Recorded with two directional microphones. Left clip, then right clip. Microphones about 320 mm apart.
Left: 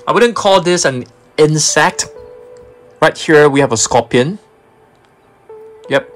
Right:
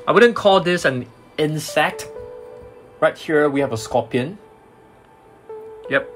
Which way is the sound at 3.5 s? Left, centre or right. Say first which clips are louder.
Left 9 dB; left.